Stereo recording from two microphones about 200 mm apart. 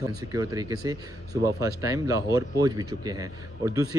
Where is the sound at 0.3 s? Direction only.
15° right (ahead or behind).